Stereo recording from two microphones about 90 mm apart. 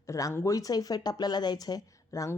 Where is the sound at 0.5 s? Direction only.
45° left (ahead or behind).